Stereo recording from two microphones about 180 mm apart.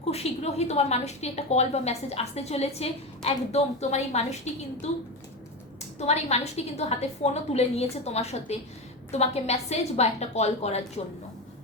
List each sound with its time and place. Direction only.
0.1 s a woman's voice: 35° left (ahead or behind)